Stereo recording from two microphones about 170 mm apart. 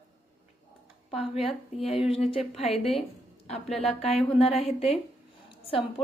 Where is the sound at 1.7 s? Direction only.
35° left (ahead or behind).